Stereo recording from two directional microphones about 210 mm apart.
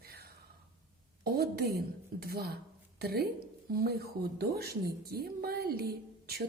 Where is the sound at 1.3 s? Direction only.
50° right (ahead or behind).